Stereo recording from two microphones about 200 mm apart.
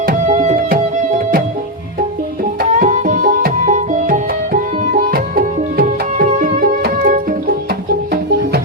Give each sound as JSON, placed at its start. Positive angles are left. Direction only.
{"t": 0.0, "sound": "music", "side_deg": -40}
{"t": 2.4, "sound": "music", "side_deg": -40}